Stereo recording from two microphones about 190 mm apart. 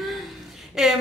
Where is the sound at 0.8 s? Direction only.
Centre (ahead or behind).